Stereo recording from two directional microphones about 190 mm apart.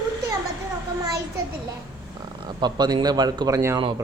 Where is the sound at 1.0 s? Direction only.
20° right (ahead or behind).